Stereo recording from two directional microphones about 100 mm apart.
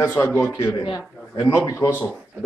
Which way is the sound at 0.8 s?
45° left (ahead or behind).